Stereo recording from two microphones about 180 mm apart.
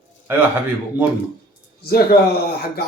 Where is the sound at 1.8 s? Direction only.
60° left (ahead or behind).